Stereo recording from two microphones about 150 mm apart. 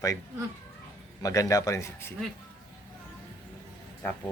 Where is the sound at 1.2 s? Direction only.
20° left (ahead or behind).